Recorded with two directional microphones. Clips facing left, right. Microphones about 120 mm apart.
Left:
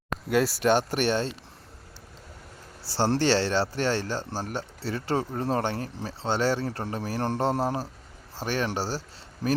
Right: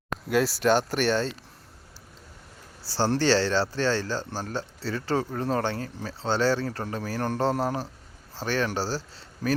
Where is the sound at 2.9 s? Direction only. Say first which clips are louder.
Even; 25° left (ahead or behind).